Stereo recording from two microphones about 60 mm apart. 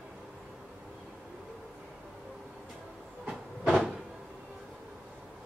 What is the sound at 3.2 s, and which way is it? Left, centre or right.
Train, centre.